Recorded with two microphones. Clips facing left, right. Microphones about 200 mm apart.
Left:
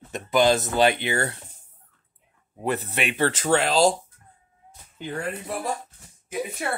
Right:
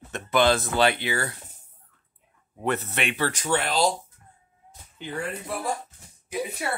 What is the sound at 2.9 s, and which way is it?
Speech, 15° left (ahead or behind).